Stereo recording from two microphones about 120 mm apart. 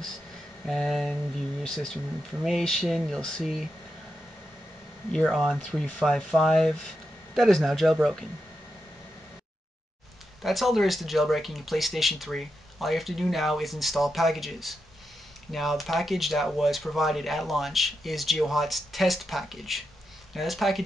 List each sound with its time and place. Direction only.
0.7 s speech: centre (ahead or behind)
5.1 s speech: 5° left (ahead or behind)
10.4 s speech: centre (ahead or behind)